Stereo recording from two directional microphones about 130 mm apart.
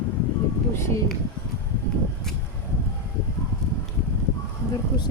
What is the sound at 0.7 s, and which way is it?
Speech, 20° left (ahead or behind).